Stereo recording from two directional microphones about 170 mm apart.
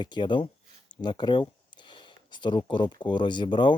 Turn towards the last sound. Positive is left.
turn(degrees=30)  # may be behind; listen again after turning